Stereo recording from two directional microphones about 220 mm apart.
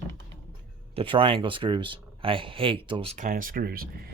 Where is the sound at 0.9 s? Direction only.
25° right (ahead or behind).